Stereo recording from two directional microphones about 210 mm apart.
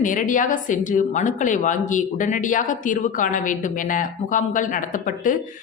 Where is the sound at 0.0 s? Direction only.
40° left (ahead or behind).